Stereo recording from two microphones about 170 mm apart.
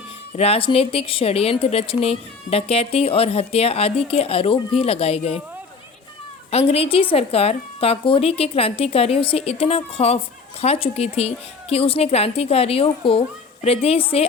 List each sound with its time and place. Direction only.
0.3 s speech: 35° left (ahead or behind)
6.5 s speech: 35° left (ahead or behind)